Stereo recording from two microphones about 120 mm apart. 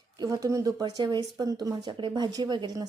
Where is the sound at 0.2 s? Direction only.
30° right (ahead or behind).